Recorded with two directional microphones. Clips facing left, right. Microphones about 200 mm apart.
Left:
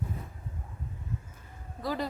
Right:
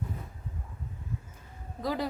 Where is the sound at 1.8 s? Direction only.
15° right (ahead or behind).